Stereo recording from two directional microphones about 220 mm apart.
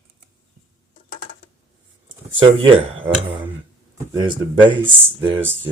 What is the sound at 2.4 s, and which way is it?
Speech, 20° right (ahead or behind).